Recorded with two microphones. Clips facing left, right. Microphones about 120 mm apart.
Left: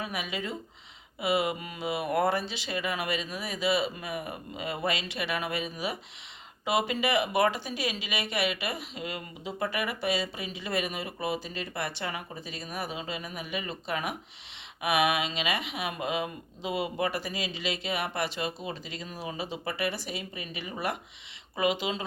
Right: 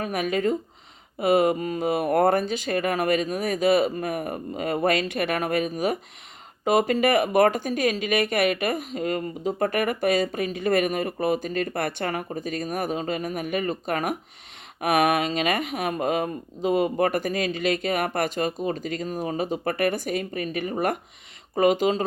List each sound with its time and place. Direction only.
0.0 s speech: 50° right (ahead or behind)